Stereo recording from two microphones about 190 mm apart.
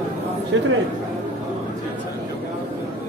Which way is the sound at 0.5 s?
85° right.